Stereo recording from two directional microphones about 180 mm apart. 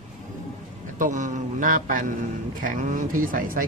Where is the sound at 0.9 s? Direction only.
45° right (ahead or behind).